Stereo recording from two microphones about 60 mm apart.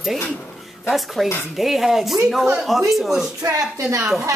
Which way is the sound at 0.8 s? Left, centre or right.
Centre.